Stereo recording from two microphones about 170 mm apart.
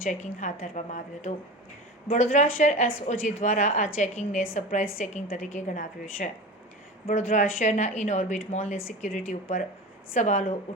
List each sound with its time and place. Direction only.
0.0 s a woman's voice: 45° left (ahead or behind)